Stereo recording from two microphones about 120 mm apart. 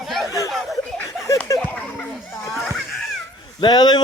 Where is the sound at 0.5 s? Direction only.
Centre (ahead or behind).